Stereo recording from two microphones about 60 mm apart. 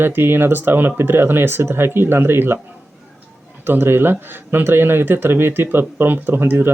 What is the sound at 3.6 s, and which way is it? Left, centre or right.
Speech, right.